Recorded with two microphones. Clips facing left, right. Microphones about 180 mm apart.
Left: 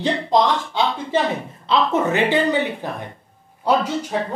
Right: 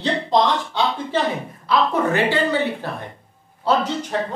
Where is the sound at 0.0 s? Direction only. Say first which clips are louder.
Left 1 dB; 10° left (ahead or behind).